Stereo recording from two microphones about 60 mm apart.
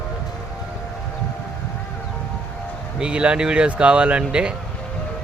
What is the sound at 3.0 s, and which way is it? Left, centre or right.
Speech, centre.